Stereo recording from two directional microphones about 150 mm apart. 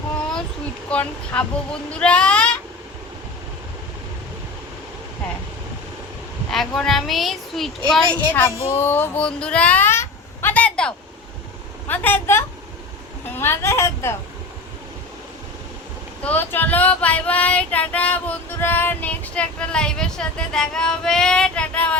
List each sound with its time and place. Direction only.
0.9 s female singing: 10° left (ahead or behind)
6.5 s speech: centre (ahead or behind)
8.3 s female singing: 15° left (ahead or behind)
8.6 s a sound: 15° left (ahead or behind)
11.9 s female singing: 15° left (ahead or behind)
16.2 s female singing: 10° left (ahead or behind)